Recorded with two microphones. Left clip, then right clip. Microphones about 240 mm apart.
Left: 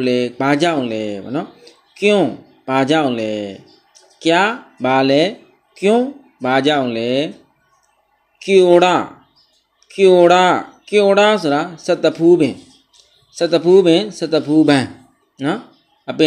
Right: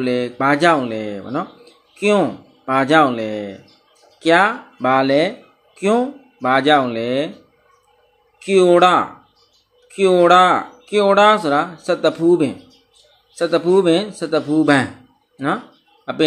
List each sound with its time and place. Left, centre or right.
0.0 s speech: centre
8.4 s a man's voice: centre